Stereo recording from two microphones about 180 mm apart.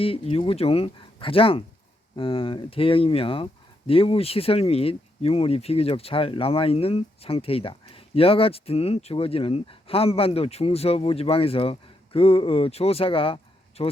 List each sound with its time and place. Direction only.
0.0 s speech: 30° left (ahead or behind)